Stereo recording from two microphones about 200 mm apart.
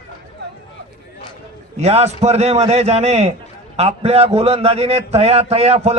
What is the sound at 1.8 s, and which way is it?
A man's voice, 30° right (ahead or behind).